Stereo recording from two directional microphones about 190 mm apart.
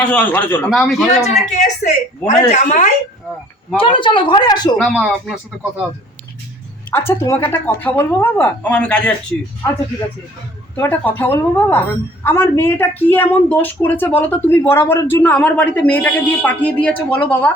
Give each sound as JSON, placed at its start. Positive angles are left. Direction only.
{"t": 0.0, "sound": "speech", "side_deg": 10}
{"t": 1.3, "sound": "a woman's voice", "side_deg": 35}
{"t": 3.8, "sound": "speech", "side_deg": 25}
{"t": 4.8, "sound": "speech", "side_deg": 5}
{"t": 6.9, "sound": "speech", "side_deg": 15}
{"t": 10.8, "sound": "speech", "side_deg": 10}